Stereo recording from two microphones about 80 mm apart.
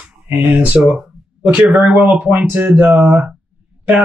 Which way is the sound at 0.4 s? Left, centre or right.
Centre.